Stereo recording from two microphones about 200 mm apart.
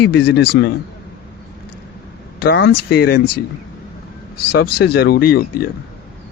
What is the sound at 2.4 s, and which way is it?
Speech, 60° left (ahead or behind).